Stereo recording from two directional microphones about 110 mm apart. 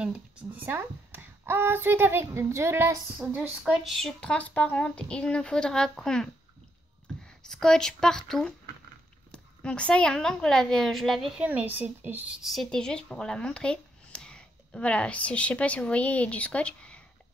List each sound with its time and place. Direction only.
0.0 s speech: 10° right (ahead or behind)
3.2 s speech: 15° right (ahead or behind)
3.9 s a woman's voice: 5° left (ahead or behind)
7.2 s a woman's voice: 5° left (ahead or behind)
11.4 s speech: 15° right (ahead or behind)
12.4 s speech: 5° left (ahead or behind)